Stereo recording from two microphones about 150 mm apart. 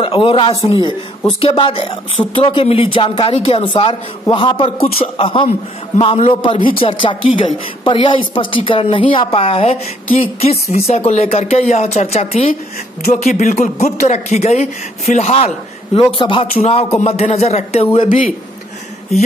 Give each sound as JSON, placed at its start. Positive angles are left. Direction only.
{"t": 0.0, "sound": "a man's voice", "side_deg": 35}